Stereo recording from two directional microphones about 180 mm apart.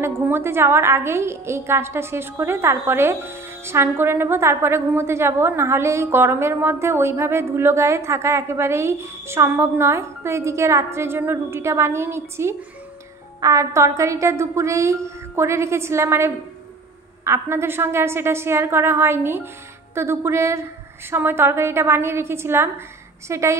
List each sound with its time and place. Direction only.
0.0 s a woman's voice: 15° right (ahead or behind)